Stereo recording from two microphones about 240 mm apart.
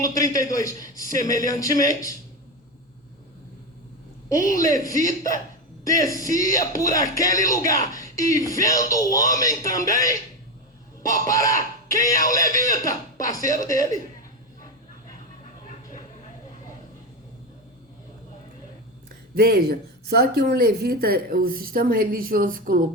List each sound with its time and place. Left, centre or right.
0.0 s speech: centre
4.3 s speech: centre
5.8 s speech: centre
19.3 s speech: right